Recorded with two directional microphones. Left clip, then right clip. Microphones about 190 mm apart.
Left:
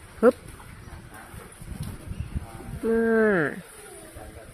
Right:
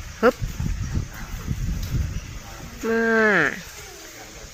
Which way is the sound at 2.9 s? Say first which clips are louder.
Right 3 dB; 10° left (ahead or behind).